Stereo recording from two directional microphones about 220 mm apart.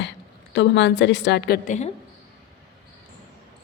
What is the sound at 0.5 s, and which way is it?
A woman's voice, 50° left (ahead or behind).